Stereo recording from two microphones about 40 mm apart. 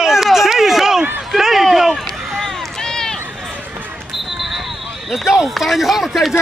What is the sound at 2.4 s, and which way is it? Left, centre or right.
Run, centre.